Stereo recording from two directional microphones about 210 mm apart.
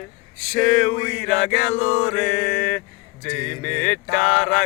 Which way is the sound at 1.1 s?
5° left (ahead or behind).